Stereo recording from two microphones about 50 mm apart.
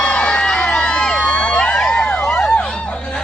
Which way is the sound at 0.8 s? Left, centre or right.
Centre.